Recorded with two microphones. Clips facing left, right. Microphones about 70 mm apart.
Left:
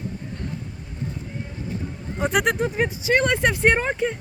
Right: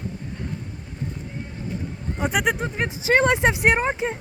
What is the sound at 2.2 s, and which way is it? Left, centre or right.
Speech, centre.